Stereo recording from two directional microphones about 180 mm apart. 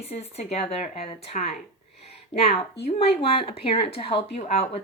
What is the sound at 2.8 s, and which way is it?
Speech, 35° left (ahead or behind).